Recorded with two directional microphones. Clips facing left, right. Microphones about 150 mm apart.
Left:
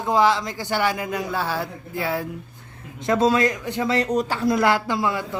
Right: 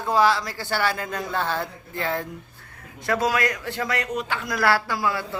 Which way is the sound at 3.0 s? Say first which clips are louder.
Left 4 dB; 25° left (ahead or behind).